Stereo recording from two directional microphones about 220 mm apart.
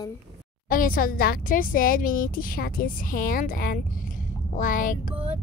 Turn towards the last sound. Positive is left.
turn(degrees=35)  # may be behind; listen again after turning